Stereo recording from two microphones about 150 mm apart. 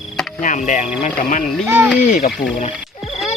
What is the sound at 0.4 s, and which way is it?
Speech, 55° left (ahead or behind).